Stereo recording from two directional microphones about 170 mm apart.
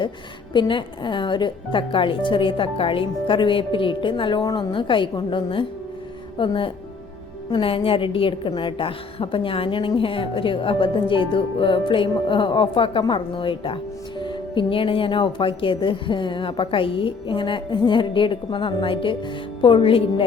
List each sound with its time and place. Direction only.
0.5 s a woman's voice: 30° left (ahead or behind)